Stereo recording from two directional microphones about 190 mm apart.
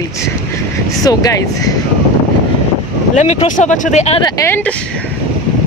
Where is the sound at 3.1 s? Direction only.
40° left (ahead or behind).